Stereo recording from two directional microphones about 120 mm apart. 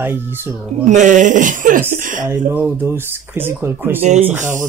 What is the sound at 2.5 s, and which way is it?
Speech, 15° right (ahead or behind).